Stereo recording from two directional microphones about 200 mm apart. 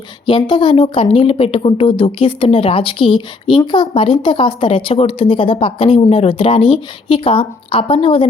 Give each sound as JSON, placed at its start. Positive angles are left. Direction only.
{"t": 0.3, "sound": "a woman's voice", "side_deg": 25}